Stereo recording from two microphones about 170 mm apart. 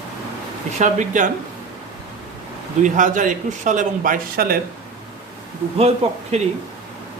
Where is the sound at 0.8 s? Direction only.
45° right (ahead or behind).